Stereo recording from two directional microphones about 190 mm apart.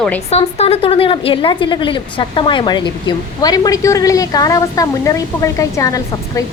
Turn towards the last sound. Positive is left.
turn(degrees=15)  # may be behind; listen again after turning